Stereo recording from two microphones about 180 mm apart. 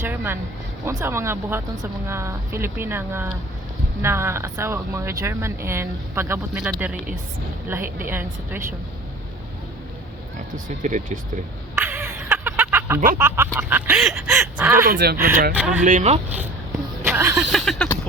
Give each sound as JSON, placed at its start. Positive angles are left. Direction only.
{"t": 0.0, "sound": "a sound", "side_deg": -10}
{"t": 0.9, "sound": "speech", "side_deg": -15}
{"t": 7.9, "sound": "speech", "side_deg": -10}
{"t": 10.7, "sound": "speech", "side_deg": -40}
{"t": 11.7, "sound": "a sound", "side_deg": -5}
{"t": 13.1, "sound": "speech", "side_deg": -10}
{"t": 14.8, "sound": "speech", "side_deg": -60}
{"t": 15.5, "sound": "speech", "side_deg": -5}
{"t": 15.8, "sound": "speech", "side_deg": -45}
{"t": 17.0, "sound": "music", "side_deg": -15}
{"t": 17.3, "sound": "a sound", "side_deg": 0}